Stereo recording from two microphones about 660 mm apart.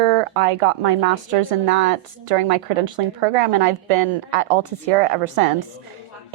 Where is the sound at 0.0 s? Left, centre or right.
Right.